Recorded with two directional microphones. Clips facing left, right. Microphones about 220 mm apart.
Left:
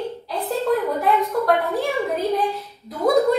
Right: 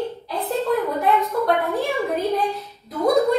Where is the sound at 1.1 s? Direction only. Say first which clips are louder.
Left 1 dB; centre (ahead or behind).